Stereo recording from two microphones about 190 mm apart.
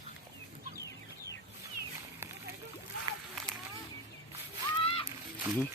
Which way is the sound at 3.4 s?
Centre (ahead or behind).